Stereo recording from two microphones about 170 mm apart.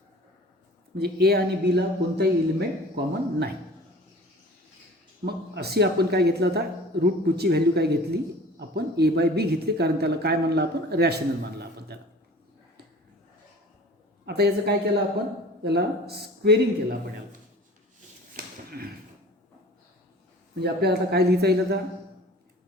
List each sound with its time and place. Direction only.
0.9 s speech: 70° right (ahead or behind)
5.2 s speech: 70° right (ahead or behind)
11.6 s a sound: 70° right (ahead or behind)
14.3 s speech: 70° right (ahead or behind)
18.4 s a sound: 60° right (ahead or behind)
20.6 s speech: 70° right (ahead or behind)